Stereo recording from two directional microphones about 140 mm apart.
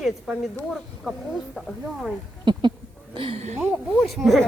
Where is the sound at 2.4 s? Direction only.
35° right (ahead or behind).